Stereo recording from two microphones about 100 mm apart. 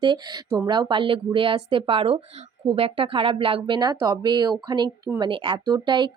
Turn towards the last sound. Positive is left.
turn(degrees=-50)  # may be behind; listen again after turning